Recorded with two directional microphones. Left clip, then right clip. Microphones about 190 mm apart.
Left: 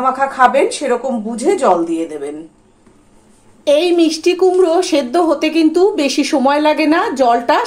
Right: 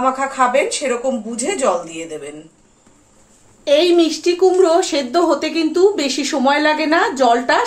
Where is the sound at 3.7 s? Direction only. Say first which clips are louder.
Left 1 dB; 25° left (ahead or behind).